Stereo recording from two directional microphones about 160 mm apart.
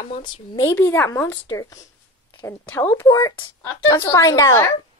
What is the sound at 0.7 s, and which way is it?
A woman's voice, 15° left (ahead or behind).